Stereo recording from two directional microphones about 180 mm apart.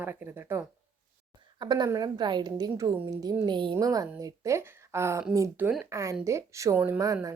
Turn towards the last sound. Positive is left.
turn(degrees=-20)  # may be behind; listen again after turning